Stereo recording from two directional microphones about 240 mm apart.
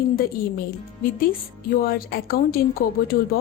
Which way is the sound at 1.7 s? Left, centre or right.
Left.